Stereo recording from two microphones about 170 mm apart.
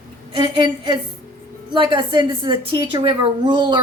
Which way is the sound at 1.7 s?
30° right (ahead or behind).